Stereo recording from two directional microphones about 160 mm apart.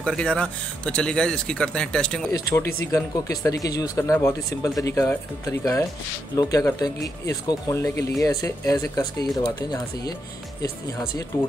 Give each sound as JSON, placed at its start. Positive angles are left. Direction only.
{"t": 0.0, "sound": "speech", "side_deg": 5}
{"t": 2.3, "sound": "speech", "side_deg": 20}